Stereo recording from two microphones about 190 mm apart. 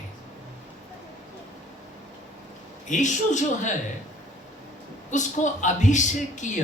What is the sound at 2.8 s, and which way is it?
Speech, 40° left (ahead or behind).